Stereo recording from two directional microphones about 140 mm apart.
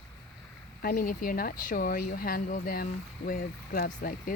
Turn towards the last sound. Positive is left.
turn(degrees=90)